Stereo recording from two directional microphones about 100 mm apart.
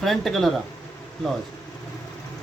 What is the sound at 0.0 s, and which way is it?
Speech, centre (ahead or behind).